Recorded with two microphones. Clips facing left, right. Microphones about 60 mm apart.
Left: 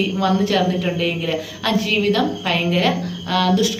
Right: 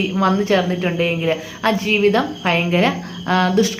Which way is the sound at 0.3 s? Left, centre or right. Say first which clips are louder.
Right 1 dB; right.